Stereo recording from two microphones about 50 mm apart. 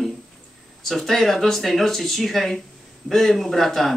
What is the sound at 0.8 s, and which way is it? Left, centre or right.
Speech, centre.